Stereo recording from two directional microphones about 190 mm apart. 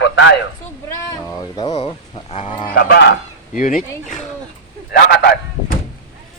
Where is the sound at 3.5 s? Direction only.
45° left (ahead or behind).